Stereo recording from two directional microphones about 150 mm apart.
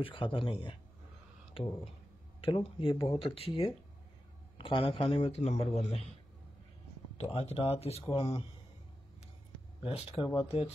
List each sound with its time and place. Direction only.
0.0 s a man's voice: 35° left (ahead or behind)
4.6 s a man's voice: 35° left (ahead or behind)
7.2 s a man's voice: 45° left (ahead or behind)
9.8 s a man's voice: 40° left (ahead or behind)